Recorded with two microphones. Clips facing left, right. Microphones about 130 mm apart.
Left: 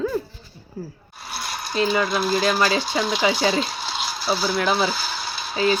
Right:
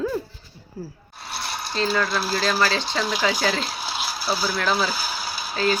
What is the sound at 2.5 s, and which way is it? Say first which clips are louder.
Speech: left 2 dB; 15° left (ahead or behind).